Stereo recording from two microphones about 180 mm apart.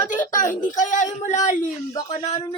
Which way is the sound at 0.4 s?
45° left (ahead or behind).